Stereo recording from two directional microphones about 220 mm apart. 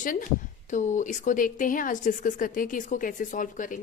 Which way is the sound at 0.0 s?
35° left (ahead or behind).